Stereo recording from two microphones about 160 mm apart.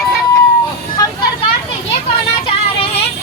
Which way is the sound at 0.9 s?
25° left (ahead or behind).